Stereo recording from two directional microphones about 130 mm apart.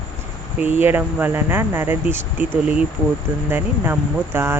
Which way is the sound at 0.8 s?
15° right (ahead or behind).